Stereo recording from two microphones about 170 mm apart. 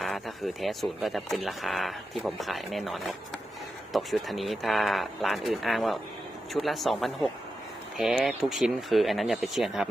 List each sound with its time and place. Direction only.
0.0 s speech: centre (ahead or behind)